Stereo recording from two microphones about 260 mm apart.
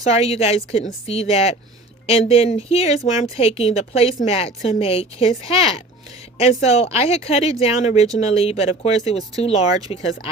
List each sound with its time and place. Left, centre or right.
0.1 s speech: left